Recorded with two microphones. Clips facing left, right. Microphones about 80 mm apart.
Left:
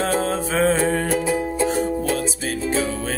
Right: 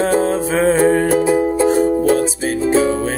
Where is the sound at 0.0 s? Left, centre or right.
Right.